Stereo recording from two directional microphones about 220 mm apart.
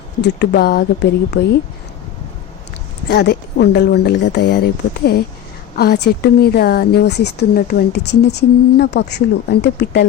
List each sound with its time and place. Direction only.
0.2 s speech: 45° left (ahead or behind)
3.1 s speech: 50° left (ahead or behind)